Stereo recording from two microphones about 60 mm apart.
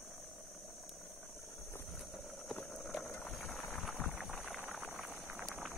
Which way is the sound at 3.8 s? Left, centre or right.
Left.